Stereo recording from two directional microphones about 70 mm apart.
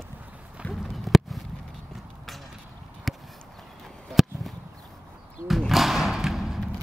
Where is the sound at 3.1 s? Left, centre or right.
Centre.